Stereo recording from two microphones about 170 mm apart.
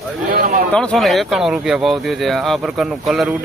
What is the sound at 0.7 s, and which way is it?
Speech, 5° left (ahead or behind).